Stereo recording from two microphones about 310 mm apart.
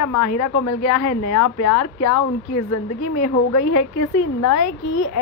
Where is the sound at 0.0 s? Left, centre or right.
Left.